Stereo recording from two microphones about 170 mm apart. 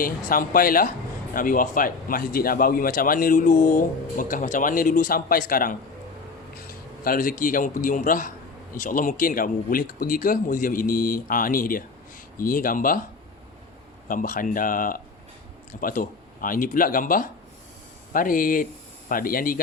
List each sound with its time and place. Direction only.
0.0 s a man's voice: 55° left (ahead or behind)
7.0 s a man's voice: 55° left (ahead or behind)
14.1 s speech: 50° left (ahead or behind)